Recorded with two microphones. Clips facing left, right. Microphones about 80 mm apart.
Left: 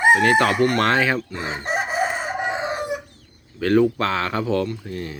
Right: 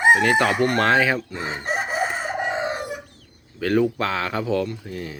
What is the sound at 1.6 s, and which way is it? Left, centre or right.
Chicken, left.